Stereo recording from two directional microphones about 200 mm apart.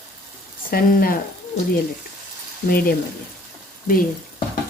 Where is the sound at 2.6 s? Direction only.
50° left (ahead or behind).